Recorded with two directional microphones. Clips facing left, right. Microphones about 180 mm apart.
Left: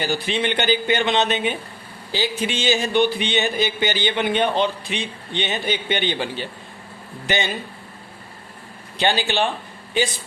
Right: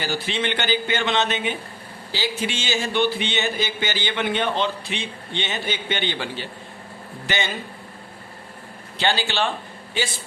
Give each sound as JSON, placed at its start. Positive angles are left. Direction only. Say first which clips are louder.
{"t": 0.0, "sound": "speech", "louder": "left 3 dB", "side_deg": 15}
{"t": 9.0, "sound": "speech", "louder": "left 3 dB", "side_deg": 15}